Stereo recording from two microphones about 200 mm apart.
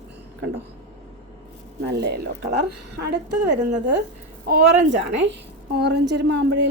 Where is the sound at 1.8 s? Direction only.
55° right (ahead or behind).